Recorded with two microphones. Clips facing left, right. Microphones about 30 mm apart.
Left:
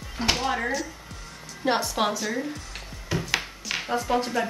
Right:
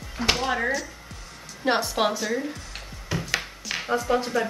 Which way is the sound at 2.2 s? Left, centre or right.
Centre.